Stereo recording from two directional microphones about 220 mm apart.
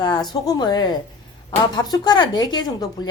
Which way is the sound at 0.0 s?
20° left (ahead or behind).